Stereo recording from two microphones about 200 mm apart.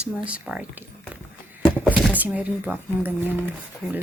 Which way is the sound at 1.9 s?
5° left (ahead or behind).